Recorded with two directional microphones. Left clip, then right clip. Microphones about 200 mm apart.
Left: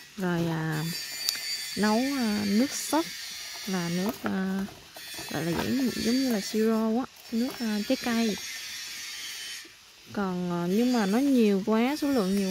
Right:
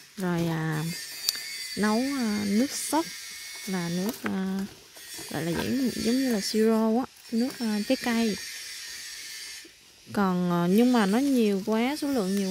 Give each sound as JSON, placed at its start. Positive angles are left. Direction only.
{"t": 0.2, "sound": "speech", "side_deg": -10}
{"t": 10.1, "sound": "speech", "side_deg": -25}
{"t": 11.1, "sound": "speech", "side_deg": 0}